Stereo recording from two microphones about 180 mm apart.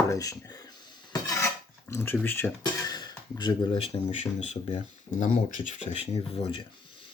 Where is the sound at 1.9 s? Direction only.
10° left (ahead or behind); by 6.6 s 35° left (ahead or behind).